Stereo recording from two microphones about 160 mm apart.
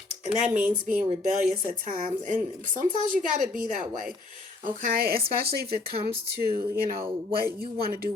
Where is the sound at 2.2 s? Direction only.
55° right (ahead or behind); by 6.0 s 75° right (ahead or behind).